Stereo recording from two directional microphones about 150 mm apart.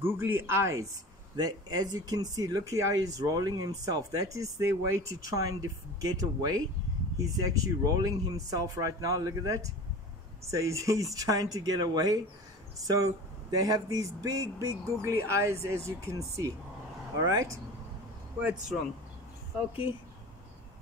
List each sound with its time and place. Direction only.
0.0 s speech: 15° right (ahead or behind)
18.4 s speech: 5° right (ahead or behind)